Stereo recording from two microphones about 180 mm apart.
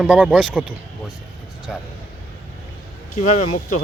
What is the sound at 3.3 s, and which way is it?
Speech, 40° left (ahead or behind).